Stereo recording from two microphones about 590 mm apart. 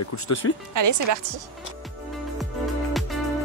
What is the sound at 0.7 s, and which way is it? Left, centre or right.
Speech, right.